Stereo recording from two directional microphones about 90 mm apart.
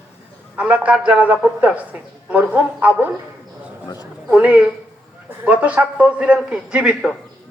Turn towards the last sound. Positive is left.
turn(degrees=-10)  # may be behind; listen again after turning